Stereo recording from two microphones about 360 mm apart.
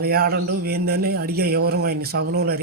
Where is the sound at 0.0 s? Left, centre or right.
Right.